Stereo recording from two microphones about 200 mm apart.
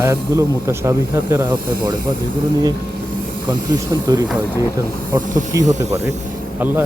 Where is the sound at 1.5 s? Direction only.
20° right (ahead or behind).